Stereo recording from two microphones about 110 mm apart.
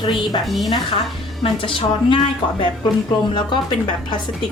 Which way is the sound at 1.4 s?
55° left (ahead or behind).